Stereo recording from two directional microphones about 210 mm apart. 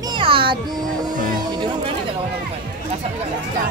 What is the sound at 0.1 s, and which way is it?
Music, 25° right (ahead or behind).